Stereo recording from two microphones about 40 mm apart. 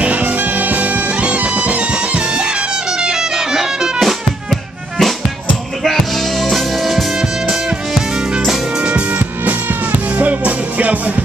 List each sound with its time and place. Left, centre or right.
0.0 s music: right
3.0 s music: centre
4.5 s music: centre
6.4 s music: centre
10.1 s music: right